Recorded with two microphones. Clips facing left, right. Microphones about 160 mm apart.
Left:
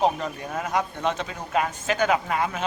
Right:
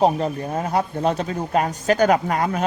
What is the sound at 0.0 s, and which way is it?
Speech, 35° right (ahead or behind).